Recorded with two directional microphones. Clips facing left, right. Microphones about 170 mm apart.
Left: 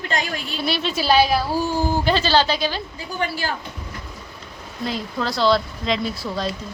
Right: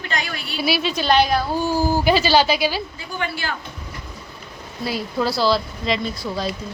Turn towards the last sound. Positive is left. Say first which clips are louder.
# even
turn(degrees=0)  # may be behind; listen again after turning